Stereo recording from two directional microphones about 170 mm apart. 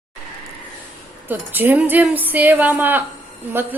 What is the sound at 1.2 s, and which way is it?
A woman's voice, 10° right (ahead or behind).